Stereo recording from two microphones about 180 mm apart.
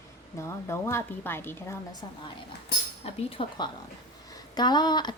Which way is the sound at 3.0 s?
35° left (ahead or behind).